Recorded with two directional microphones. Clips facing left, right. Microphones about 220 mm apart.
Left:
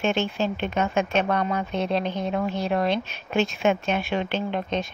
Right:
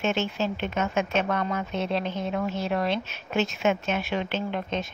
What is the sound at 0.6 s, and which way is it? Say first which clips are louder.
Speech: left 2 dB; 35° left (ahead or behind).